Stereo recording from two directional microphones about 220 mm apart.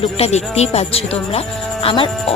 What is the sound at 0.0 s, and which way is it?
Speech, 30° left (ahead or behind).